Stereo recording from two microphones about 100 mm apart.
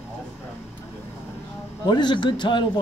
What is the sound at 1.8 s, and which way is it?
Speech, 45° left (ahead or behind).